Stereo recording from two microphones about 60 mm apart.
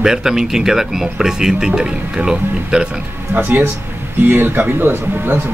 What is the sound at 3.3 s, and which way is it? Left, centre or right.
Speech, right.